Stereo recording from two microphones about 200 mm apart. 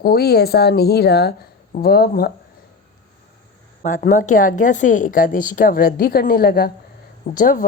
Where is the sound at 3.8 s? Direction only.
40° left (ahead or behind).